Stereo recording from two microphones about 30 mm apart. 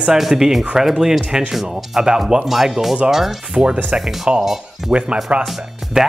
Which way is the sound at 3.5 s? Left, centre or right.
Right.